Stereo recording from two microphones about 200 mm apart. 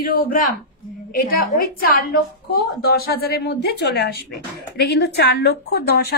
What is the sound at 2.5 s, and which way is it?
A woman's voice, 50° left (ahead or behind).